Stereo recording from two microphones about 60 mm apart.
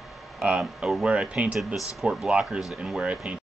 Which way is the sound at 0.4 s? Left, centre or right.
Centre.